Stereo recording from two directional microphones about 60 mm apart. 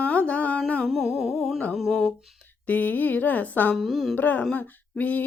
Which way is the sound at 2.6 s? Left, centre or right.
Left.